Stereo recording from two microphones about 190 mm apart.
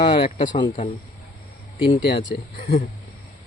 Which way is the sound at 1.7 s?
25° left (ahead or behind).